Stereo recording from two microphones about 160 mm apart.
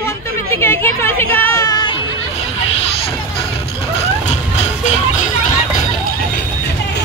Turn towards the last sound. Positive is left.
turn(degrees=45)  # may be behind; listen again after turning